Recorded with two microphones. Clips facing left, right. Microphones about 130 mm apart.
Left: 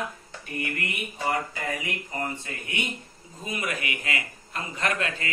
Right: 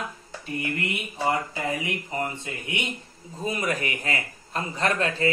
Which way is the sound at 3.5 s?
35° right (ahead or behind).